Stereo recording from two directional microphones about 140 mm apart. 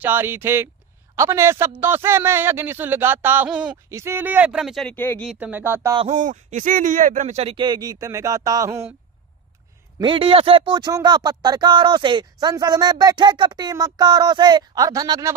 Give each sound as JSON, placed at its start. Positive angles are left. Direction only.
{"t": 0.0, "sound": "a man's voice", "side_deg": -15}
{"t": 3.9, "sound": "a man's voice", "side_deg": -20}
{"t": 4.9, "sound": "speech", "side_deg": 10}
{"t": 5.3, "sound": "a man's voice", "side_deg": -10}
{"t": 6.1, "sound": "speech", "side_deg": -65}
{"t": 7.5, "sound": "speech", "side_deg": -30}
{"t": 9.9, "sound": "speech", "side_deg": -35}